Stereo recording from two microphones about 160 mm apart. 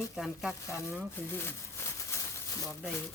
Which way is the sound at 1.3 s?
15° left (ahead or behind).